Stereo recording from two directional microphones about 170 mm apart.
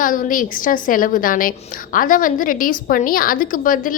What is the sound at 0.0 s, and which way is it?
A woman's voice, 55° left (ahead or behind).